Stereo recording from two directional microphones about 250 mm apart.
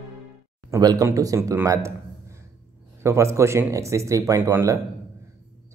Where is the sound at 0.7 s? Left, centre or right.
Centre.